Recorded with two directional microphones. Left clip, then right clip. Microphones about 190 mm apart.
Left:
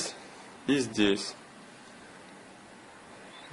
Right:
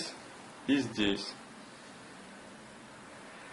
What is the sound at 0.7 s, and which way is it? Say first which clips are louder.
Speech: left 4 dB; 45° left (ahead or behind).